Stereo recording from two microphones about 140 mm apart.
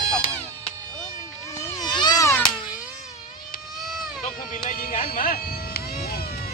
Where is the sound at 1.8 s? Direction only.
30° left (ahead or behind).